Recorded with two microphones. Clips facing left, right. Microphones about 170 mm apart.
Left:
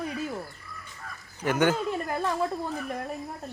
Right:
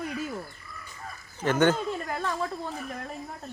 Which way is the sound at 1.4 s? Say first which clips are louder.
Right 1 dB; 10° left (ahead or behind).